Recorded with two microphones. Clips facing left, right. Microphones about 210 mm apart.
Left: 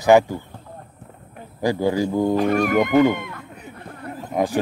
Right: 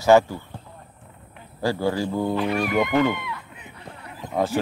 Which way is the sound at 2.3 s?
45° left (ahead or behind).